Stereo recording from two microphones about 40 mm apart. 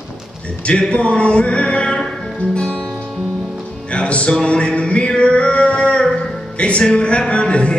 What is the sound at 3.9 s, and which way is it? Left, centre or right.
Music, left.